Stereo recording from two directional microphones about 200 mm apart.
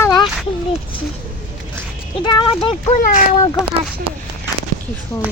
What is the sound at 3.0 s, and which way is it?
Speech, 40° left (ahead or behind).